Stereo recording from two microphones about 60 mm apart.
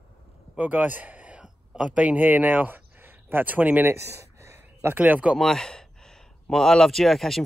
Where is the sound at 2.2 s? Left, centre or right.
Right.